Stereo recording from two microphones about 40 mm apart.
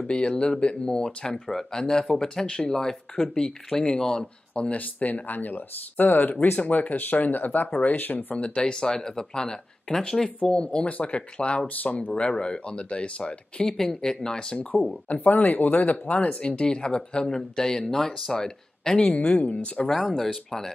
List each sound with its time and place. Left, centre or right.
0.1 s speech: left
2.4 s speech: left
2.7 s speech: centre
4.7 s speech: left
7.9 s speech: left
8.4 s speech: left
11.6 s speech: left
12.1 s speech: left
13.7 s speech: centre
15.0 s speech: left
16.3 s speech: left
18.9 s speech: left
19.9 s speech: centre